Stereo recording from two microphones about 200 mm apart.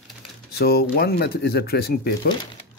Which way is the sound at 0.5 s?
50° left (ahead or behind).